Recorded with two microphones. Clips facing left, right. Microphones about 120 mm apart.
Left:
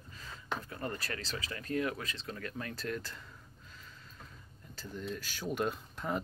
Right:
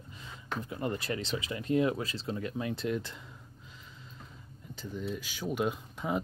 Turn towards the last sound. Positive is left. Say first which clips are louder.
# right 3 dB
turn(degrees=-10)  # may be behind; listen again after turning